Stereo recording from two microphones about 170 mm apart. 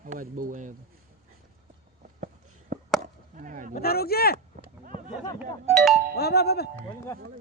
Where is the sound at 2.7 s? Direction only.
50° right (ahead or behind).